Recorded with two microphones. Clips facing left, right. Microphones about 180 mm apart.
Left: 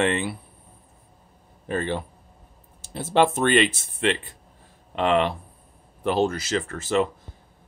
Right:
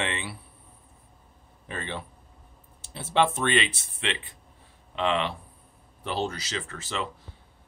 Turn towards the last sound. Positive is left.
turn(degrees=45)  # may be behind; listen again after turning